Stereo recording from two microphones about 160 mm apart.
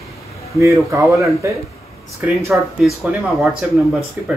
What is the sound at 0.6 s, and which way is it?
Speech, 20° right (ahead or behind).